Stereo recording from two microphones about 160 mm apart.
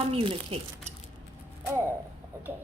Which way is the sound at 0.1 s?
35° right (ahead or behind).